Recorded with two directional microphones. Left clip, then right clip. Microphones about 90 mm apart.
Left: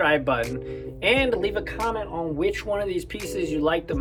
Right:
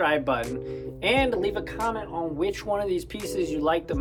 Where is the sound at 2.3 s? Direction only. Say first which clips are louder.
Left 2 dB; 25° right (ahead or behind).